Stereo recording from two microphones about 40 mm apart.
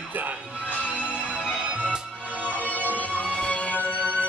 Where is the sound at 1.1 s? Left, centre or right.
Right.